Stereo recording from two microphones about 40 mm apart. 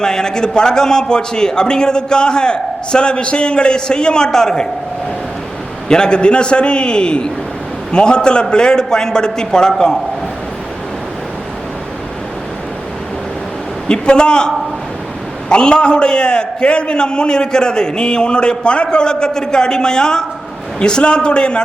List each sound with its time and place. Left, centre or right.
0.0 s a man's voice: centre
5.9 s a man's voice: left
13.8 s a man's voice: left